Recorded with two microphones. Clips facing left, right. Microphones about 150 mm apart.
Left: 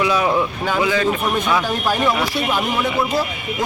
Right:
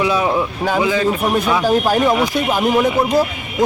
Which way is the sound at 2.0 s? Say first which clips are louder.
Right 4 dB; 20° right (ahead or behind).